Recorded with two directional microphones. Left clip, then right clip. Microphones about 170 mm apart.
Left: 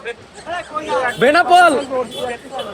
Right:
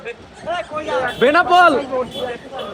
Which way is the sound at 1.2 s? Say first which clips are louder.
Left 1 dB; 25° right (ahead or behind).